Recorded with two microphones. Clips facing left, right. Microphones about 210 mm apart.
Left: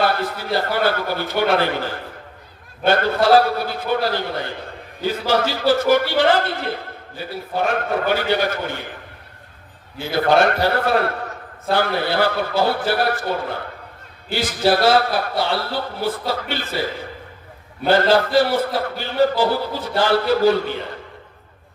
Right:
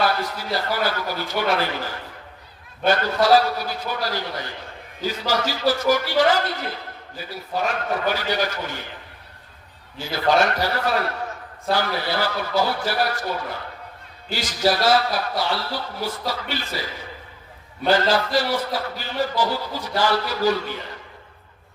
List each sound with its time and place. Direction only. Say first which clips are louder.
0.0 s a man's voice: left 2 dB; 55° left (ahead or behind)
10.0 s a man's voice: left 4 dB; 55° left (ahead or behind)